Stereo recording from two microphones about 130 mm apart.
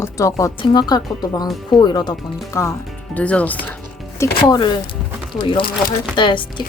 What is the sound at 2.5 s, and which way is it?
Speech, 20° left (ahead or behind).